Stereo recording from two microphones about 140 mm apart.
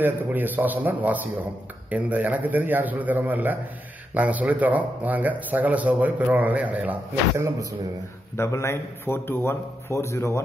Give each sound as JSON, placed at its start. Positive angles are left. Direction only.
{"t": 0.0, "sound": "speech", "side_deg": -15}
{"t": 8.4, "sound": "a man's voice", "side_deg": 20}